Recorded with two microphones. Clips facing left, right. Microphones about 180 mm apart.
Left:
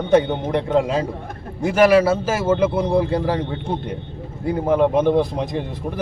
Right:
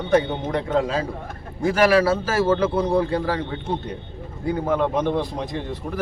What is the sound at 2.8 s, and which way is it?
Speech, 10° left (ahead or behind).